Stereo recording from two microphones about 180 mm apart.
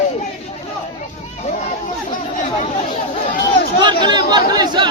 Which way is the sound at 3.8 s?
25° right (ahead or behind).